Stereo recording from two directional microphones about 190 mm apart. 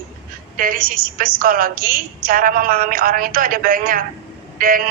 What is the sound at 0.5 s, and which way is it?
A woman's voice, 50° right (ahead or behind).